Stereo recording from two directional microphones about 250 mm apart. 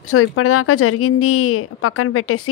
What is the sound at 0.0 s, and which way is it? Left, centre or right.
Speech, left.